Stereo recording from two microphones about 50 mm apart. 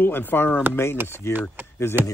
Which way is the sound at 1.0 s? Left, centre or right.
Left.